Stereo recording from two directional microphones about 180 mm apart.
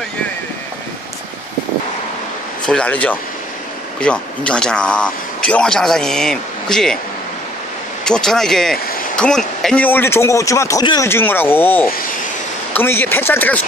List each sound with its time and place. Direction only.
2.6 s speech: 5° left (ahead or behind)
8.0 s speech: 5° left (ahead or behind)